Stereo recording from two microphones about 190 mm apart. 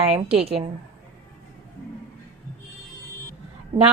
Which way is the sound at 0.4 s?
30° right (ahead or behind).